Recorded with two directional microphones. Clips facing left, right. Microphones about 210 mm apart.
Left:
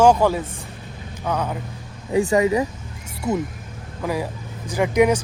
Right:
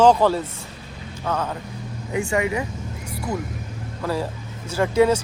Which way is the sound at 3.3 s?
25° left (ahead or behind).